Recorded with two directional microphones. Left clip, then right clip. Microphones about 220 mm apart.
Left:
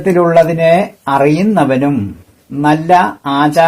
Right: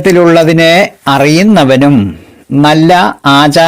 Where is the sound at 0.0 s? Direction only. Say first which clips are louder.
Right 4 dB; 35° right (ahead or behind).